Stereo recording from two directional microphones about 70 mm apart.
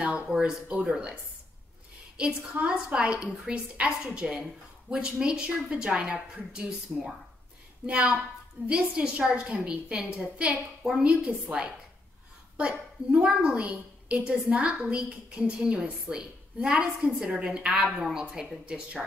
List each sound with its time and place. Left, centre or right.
0.0 s a woman's voice: centre
2.1 s a woman's voice: centre